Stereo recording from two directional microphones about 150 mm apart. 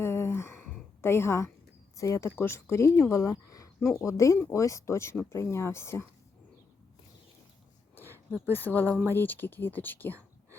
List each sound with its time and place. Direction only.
0.0 s a sound: 15° left (ahead or behind)
2.0 s speech: 20° left (ahead or behind)
8.3 s speech: 15° left (ahead or behind)